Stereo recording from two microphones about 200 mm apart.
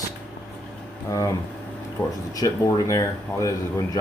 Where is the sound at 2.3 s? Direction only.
20° left (ahead or behind).